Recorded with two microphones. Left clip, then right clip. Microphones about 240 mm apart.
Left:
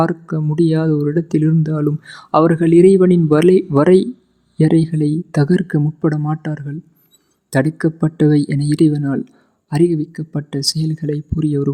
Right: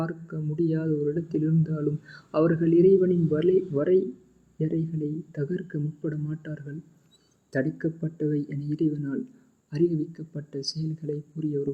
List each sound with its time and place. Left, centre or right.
0.0 s speech: left